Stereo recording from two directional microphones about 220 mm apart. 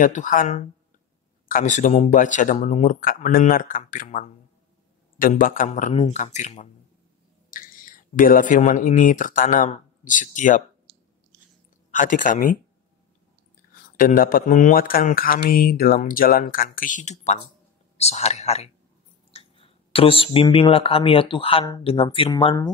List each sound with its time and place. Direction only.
0.0 s speech: 35° left (ahead or behind)
11.9 s speech: 35° left (ahead or behind)
13.9 s speech: 40° left (ahead or behind); by 22.7 s 20° left (ahead or behind)